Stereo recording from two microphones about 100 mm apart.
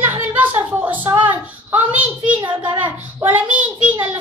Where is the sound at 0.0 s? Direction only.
20° right (ahead or behind).